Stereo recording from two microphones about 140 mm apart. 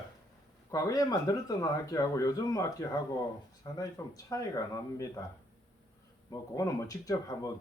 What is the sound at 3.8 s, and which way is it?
A man's voice, 25° left (ahead or behind).